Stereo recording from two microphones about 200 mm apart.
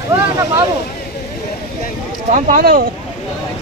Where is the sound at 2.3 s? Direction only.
40° right (ahead or behind).